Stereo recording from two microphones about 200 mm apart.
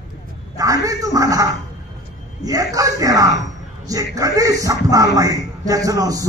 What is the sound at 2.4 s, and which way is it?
Speech, 15° right (ahead or behind).